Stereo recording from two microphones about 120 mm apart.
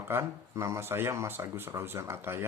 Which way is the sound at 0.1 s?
25° right (ahead or behind).